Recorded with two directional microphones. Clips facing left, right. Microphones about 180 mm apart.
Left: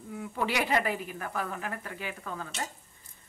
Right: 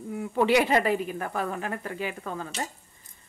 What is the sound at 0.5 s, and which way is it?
Speech, 25° right (ahead or behind).